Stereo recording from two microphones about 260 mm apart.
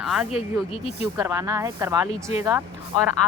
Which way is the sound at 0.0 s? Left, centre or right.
Centre.